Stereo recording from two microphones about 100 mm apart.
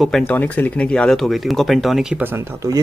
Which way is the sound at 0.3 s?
15° left (ahead or behind).